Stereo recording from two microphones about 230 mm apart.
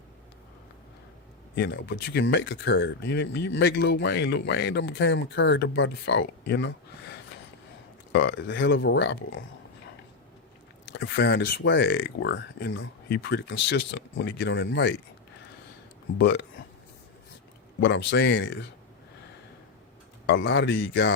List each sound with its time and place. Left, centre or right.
1.5 s speech: left
10.9 s speech: left
16.1 s speech: left
17.7 s speech: left
20.2 s speech: left